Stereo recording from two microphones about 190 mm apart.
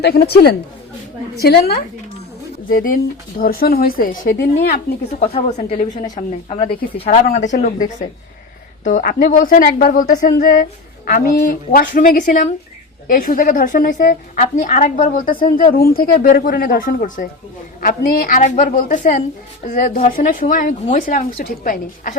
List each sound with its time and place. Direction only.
0.0 s a woman's voice: 55° left (ahead or behind)
2.6 s speech: 45° left (ahead or behind)
4.3 s a woman's voice: 65° left (ahead or behind)
5.2 s a woman's voice: 35° left (ahead or behind)